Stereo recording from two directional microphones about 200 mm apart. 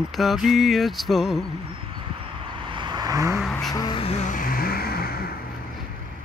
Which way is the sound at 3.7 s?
25° left (ahead or behind).